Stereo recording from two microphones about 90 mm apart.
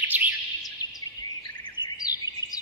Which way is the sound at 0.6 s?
45° left (ahead or behind).